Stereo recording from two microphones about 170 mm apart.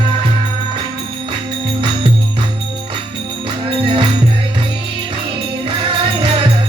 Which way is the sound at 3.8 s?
30° right (ahead or behind).